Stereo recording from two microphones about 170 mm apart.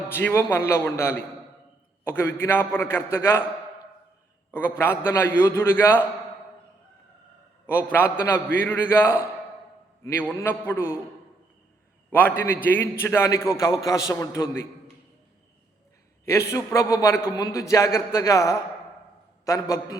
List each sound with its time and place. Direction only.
0.1 s a man's voice: 15° left (ahead or behind)
4.5 s a man's voice: 10° left (ahead or behind)
7.9 s a man's voice: 10° left (ahead or behind)
12.6 s a man's voice: 10° left (ahead or behind)
16.5 s a man's voice: 15° left (ahead or behind)